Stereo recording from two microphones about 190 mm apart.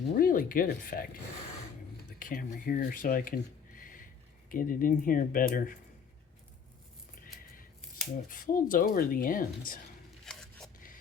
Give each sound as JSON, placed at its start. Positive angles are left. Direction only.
{"t": 0.2, "sound": "speech", "side_deg": 45}
{"t": 2.1, "sound": "speech", "side_deg": 45}
{"t": 8.3, "sound": "speech", "side_deg": 45}
{"t": 10.2, "sound": "a sound", "side_deg": 5}